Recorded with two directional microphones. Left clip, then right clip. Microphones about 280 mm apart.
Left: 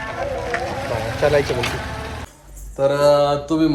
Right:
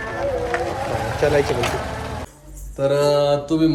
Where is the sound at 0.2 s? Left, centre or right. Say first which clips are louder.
Right 2 dB; right.